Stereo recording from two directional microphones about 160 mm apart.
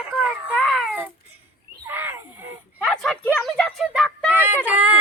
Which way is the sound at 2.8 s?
5° left (ahead or behind).